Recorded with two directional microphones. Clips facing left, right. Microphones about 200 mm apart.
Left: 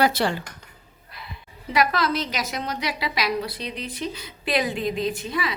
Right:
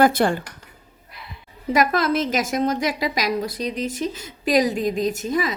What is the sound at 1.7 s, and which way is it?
A woman's voice, 45° right (ahead or behind).